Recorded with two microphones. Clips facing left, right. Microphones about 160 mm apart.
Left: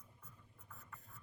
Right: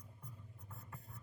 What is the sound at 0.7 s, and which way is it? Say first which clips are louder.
Writing: right 2 dB; 30° right (ahead or behind).